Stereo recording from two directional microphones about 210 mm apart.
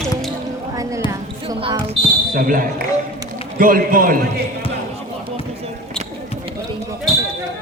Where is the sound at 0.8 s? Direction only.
15° right (ahead or behind).